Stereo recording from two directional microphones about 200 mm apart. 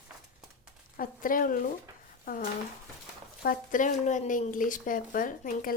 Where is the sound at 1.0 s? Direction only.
45° left (ahead or behind).